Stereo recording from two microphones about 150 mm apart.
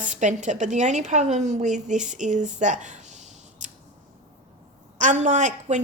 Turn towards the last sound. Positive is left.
turn(degrees=-55)  # may be behind; listen again after turning